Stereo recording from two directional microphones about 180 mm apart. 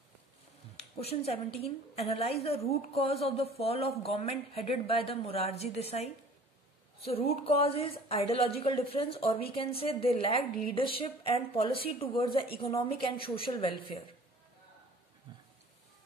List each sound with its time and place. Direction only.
1.0 s a woman's voice: 35° left (ahead or behind)
7.1 s a woman's voice: 35° left (ahead or behind)
15.3 s a sound: 25° right (ahead or behind)